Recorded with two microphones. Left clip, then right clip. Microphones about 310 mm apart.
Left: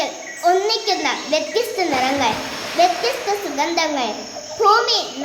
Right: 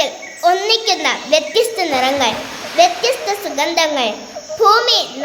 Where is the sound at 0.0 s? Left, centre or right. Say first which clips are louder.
Right 4 dB; right.